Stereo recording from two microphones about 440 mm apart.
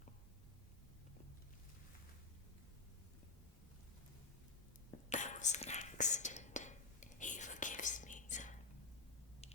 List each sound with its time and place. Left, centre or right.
4.9 s whispering: centre